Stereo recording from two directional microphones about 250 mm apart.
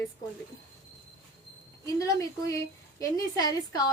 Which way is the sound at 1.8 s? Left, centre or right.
Centre.